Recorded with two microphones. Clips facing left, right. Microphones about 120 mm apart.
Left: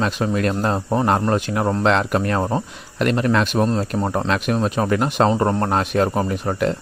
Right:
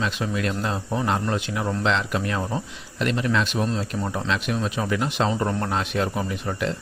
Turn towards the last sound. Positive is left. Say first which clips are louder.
# left 6 dB
turn(degrees=50)  # may be behind; listen again after turning